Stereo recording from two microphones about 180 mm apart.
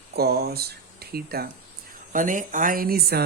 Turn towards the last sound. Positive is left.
turn(degrees=-60)  # may be behind; listen again after turning